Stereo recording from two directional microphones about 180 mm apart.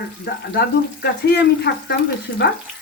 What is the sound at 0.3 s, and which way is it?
Frying, 65° left (ahead or behind).